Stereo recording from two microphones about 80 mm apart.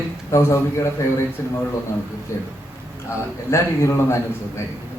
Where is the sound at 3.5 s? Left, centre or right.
Left.